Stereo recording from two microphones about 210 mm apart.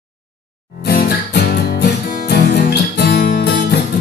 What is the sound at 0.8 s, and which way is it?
Music, 50° left (ahead or behind).